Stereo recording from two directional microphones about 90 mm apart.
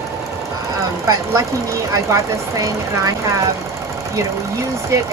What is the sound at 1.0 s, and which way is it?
Speech, 35° right (ahead or behind).